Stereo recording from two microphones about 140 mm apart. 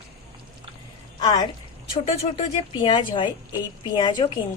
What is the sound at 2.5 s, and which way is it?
A woman's voice, 35° left (ahead or behind).